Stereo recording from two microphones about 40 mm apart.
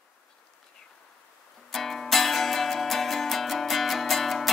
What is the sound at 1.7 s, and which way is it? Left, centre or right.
Music, centre.